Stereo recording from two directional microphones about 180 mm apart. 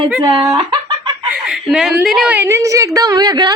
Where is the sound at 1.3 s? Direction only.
5° right (ahead or behind); by 3.5 s 25° right (ahead or behind).